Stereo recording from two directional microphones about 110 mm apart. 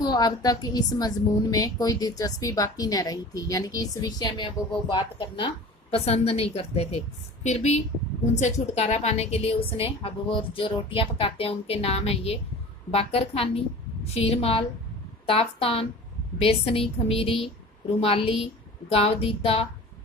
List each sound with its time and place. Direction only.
0.0 s a woman's voice: 40° left (ahead or behind)
5.9 s a woman's voice: 65° left (ahead or behind)
7.4 s a woman's voice: 90° left; by 19.6 s 60° left (ahead or behind)